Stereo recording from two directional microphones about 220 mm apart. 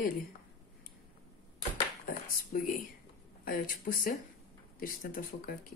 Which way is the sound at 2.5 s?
35° left (ahead or behind).